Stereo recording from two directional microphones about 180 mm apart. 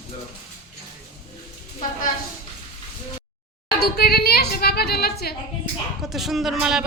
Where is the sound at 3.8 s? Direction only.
60° left (ahead or behind).